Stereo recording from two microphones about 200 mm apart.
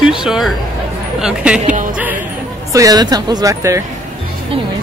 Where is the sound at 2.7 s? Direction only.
15° right (ahead or behind).